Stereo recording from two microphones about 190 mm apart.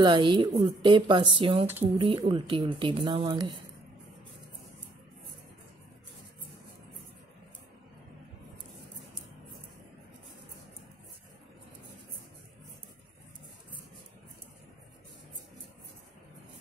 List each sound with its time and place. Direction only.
0.0 s speech: 25° right (ahead or behind)